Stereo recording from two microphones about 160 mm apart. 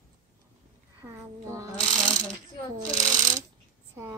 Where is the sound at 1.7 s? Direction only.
Centre (ahead or behind).